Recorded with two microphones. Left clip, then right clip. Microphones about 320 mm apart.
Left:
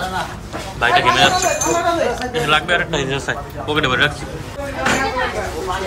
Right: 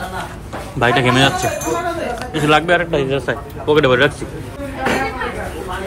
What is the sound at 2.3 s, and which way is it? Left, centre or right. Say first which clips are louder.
A man's voice: right 4 dB; centre.